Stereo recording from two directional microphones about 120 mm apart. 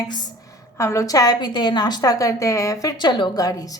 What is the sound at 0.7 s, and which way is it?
A woman's voice, 25° left (ahead or behind).